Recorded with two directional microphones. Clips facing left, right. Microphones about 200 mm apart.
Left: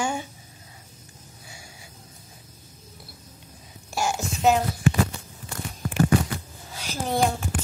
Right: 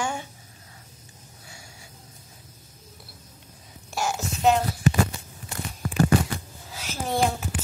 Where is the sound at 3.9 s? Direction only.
Centre (ahead or behind).